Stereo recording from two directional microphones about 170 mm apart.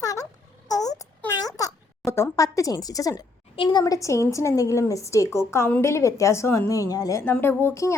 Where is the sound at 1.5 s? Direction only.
15° left (ahead or behind).